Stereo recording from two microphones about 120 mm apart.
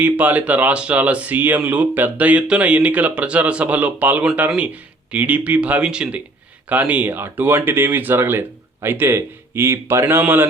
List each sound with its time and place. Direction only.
0.0 s speech: 10° right (ahead or behind)